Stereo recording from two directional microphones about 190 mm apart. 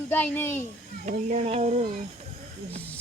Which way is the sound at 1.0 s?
40° right (ahead or behind).